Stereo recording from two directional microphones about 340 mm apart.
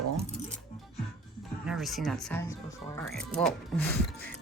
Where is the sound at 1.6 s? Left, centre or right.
Centre.